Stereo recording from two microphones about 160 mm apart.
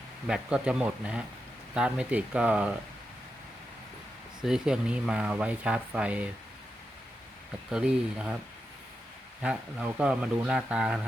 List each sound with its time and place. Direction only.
0.3 s speech: 5° right (ahead or behind)
4.4 s speech: 5° right (ahead or behind)
7.7 s speech: 5° right (ahead or behind)
9.4 s speech: 5° right (ahead or behind)